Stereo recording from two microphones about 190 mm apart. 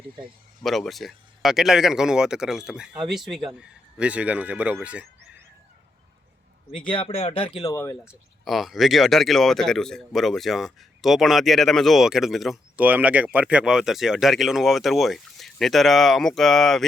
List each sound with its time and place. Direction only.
0.6 s speech: centre (ahead or behind)
6.9 s speech: 30° left (ahead or behind); by 7.9 s 15° left (ahead or behind)
8.0 s speech: centre (ahead or behind)